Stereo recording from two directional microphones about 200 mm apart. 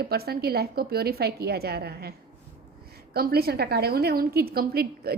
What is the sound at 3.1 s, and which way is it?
A woman's voice, 50° right (ahead or behind).